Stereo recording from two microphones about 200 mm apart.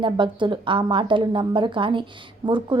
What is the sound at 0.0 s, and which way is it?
A woman's voice, 25° right (ahead or behind).